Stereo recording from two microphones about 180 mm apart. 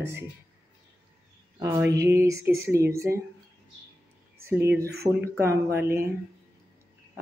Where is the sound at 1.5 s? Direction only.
20° right (ahead or behind).